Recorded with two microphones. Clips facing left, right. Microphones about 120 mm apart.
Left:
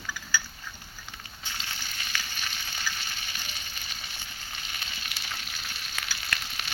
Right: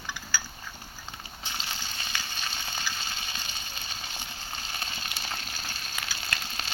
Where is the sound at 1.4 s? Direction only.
20° right (ahead or behind).